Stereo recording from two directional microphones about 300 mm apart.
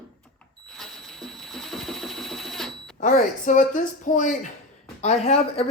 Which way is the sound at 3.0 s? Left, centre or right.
Left.